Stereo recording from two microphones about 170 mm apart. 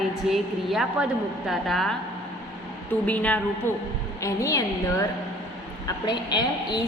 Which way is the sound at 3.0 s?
10° left (ahead or behind).